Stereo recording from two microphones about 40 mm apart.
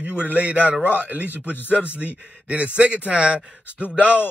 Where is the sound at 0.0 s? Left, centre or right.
Right.